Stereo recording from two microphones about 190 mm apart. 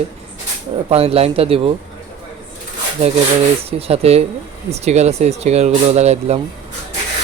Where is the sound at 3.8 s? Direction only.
35° right (ahead or behind).